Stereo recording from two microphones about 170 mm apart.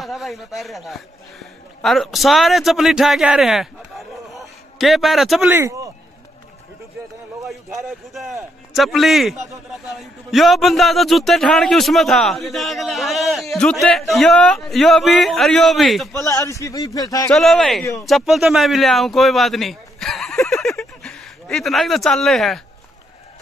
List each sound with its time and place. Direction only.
0.0 s a man's voice: centre (ahead or behind)
5.5 s speech: 15° right (ahead or behind)
7.4 s a man's voice: centre (ahead or behind)
16.1 s a man's voice: 15° left (ahead or behind)
17.3 s a man's voice: centre (ahead or behind)